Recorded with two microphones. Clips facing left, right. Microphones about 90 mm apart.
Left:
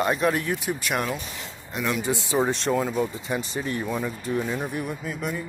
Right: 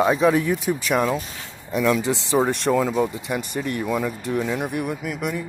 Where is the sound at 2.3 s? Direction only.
75° right (ahead or behind).